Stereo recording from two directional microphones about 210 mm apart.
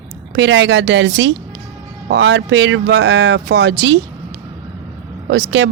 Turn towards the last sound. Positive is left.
turn(degrees=-60)  # may be behind; listen again after turning